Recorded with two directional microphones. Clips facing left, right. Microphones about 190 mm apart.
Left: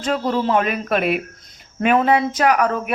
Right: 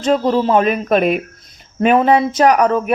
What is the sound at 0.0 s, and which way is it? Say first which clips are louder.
Speech: right 6 dB; 30° right (ahead or behind).